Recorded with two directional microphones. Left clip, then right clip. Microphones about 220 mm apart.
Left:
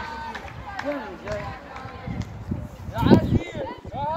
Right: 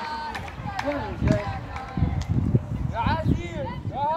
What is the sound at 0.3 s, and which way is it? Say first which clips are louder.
Run: right 2 dB; 50° right (ahead or behind).